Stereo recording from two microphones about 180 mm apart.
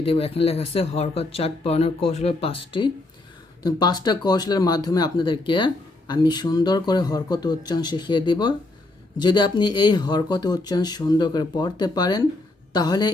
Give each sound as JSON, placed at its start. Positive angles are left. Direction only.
{"t": 0.0, "sound": "speech", "side_deg": 30}